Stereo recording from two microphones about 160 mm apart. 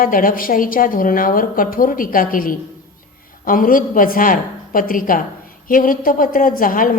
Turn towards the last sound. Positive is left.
turn(degrees=60)  # may be behind; listen again after turning